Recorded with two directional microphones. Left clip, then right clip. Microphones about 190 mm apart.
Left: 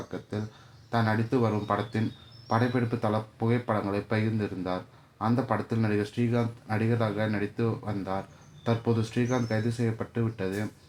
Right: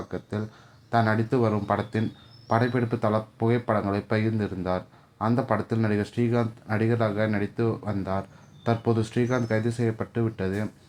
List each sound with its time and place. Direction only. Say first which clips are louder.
0.1 s speech: right 3 dB; 20° right (ahead or behind)